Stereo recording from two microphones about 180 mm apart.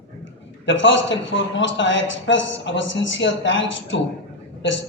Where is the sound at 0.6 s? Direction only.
90° left.